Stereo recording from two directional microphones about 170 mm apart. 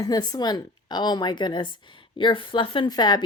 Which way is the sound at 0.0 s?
25° left (ahead or behind).